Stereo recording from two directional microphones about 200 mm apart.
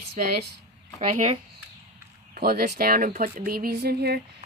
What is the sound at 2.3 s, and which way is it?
A woman's voice, 50° right (ahead or behind).